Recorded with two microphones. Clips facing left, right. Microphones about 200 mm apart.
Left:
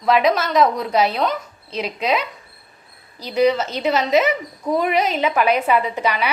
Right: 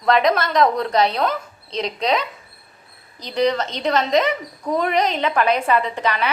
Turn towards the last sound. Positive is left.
turn(degrees=10)  # may be behind; listen again after turning